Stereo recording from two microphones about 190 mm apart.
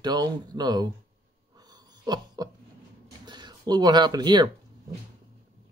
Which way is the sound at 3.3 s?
25° right (ahead or behind).